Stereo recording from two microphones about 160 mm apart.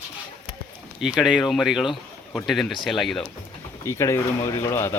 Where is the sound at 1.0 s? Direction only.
5° right (ahead or behind).